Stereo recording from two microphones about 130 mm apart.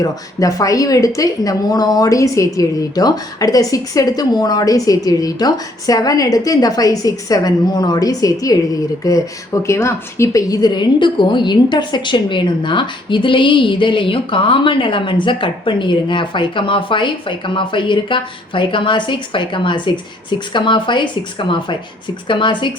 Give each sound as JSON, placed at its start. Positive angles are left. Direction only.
{"t": 0.0, "sound": "a woman's voice", "side_deg": 25}